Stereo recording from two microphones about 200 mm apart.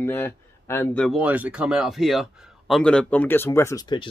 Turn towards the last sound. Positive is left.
turn(degrees=20)  # may be behind; listen again after turning